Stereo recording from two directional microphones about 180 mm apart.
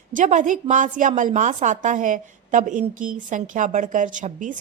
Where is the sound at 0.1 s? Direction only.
45° right (ahead or behind).